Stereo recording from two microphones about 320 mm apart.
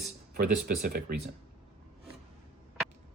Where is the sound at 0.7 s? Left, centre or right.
Right.